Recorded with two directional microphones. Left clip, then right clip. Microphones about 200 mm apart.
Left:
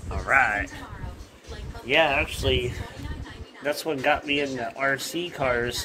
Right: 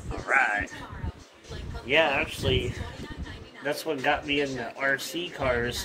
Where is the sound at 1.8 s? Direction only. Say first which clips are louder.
Left 2 dB; 55° left (ahead or behind).